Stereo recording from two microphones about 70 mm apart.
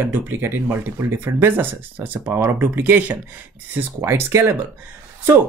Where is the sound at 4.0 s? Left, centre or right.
Right.